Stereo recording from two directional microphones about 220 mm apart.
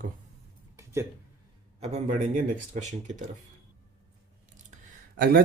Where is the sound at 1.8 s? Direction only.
30° right (ahead or behind).